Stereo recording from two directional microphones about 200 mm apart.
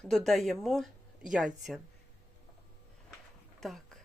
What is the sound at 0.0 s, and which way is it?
Speech, centre (ahead or behind).